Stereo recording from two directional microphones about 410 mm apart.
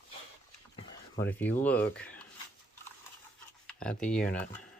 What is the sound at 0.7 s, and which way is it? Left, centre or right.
Speech, centre.